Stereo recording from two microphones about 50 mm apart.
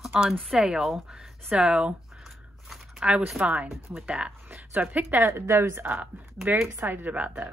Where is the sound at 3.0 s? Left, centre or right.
Right.